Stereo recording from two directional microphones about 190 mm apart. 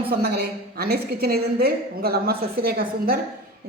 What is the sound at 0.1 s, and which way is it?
A woman's voice, 55° right (ahead or behind).